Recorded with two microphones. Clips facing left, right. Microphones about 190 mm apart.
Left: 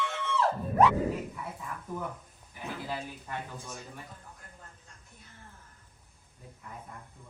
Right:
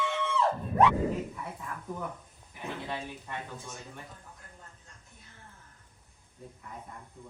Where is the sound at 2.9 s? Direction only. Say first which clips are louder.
Even; 5° left (ahead or behind).